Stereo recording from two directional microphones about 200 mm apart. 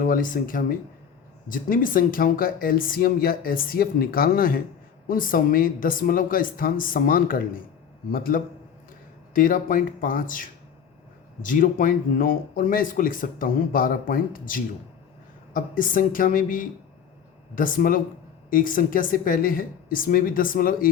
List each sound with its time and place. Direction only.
0.0 s speech: 45° left (ahead or behind)
11.4 s speech: 40° left (ahead or behind)